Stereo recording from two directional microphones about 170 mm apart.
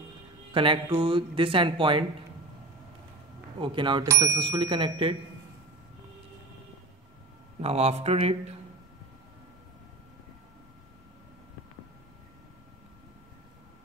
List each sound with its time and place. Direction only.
0.5 s speech: 30° right (ahead or behind)
3.5 s speech: 30° right (ahead or behind)
7.6 s speech: 40° right (ahead or behind)